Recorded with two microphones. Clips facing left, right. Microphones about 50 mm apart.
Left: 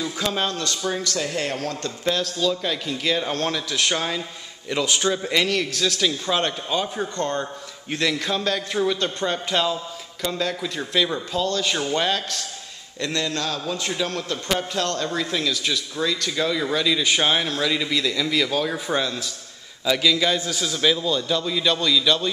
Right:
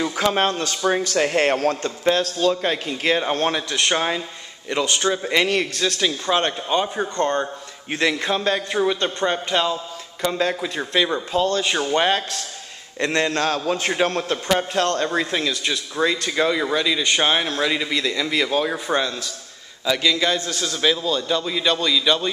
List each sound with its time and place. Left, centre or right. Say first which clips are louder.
0.0 s a man's voice: right 5 dB; right
0.5 s speech: right 5 dB; right
1.1 s speech: right 7 dB; right
1.8 s a man's voice: right 4 dB; right
3.1 s speech: right 4 dB; right
4.9 s speech: right 2 dB; centre; by 12.2 s right
13.0 s a man's voice: right 5 dB; right
15.4 s a man's voice: right 1 dB; centre